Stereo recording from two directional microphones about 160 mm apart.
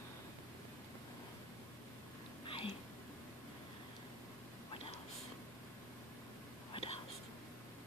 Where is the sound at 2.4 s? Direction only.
35° left (ahead or behind).